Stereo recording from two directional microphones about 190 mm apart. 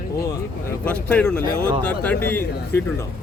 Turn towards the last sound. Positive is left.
turn(degrees=10)  # may be behind; listen again after turning